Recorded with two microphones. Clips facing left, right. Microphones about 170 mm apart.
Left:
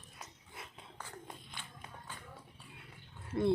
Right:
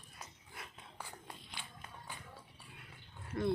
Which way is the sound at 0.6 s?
25° left (ahead or behind).